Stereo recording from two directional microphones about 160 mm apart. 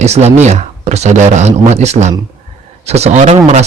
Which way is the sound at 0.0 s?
40° right (ahead or behind).